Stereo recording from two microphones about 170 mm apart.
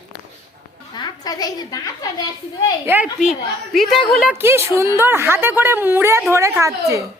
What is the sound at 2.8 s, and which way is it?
A woman's voice, 10° right (ahead or behind).